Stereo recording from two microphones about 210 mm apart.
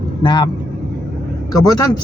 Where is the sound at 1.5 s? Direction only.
20° left (ahead or behind).